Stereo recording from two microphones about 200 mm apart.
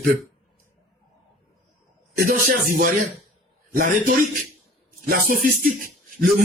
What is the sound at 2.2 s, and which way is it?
A man's voice, 45° right (ahead or behind).